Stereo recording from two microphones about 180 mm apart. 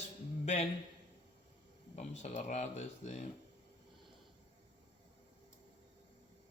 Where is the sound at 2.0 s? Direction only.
40° left (ahead or behind).